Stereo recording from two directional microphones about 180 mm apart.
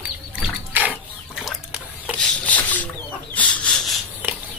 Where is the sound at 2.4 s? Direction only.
10° left (ahead or behind).